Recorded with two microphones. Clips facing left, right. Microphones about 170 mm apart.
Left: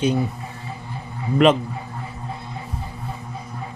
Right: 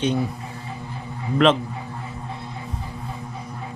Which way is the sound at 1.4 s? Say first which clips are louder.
Left 2 dB; 10° left (ahead or behind).